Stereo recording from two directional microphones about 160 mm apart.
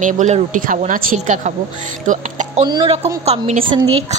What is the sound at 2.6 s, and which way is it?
Speech, 30° right (ahead or behind).